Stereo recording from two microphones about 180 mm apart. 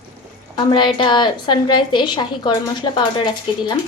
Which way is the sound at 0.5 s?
25° left (ahead or behind).